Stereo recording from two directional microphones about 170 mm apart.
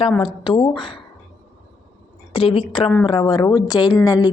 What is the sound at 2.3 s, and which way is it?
A woman's voice, 30° left (ahead or behind).